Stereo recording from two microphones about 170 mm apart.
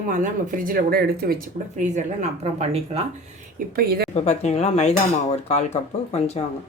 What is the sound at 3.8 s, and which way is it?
Speech, 65° right (ahead or behind).